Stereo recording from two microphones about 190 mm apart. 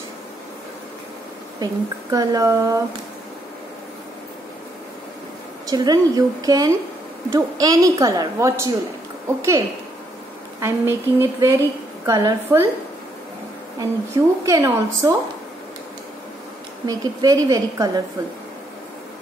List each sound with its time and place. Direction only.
1.6 s speech: 20° right (ahead or behind)
5.7 s a woman's voice: 20° right (ahead or behind)
10.6 s a woman's voice: 15° right (ahead or behind)
13.7 s a woman's voice: 15° right (ahead or behind)
16.8 s speech: 20° right (ahead or behind)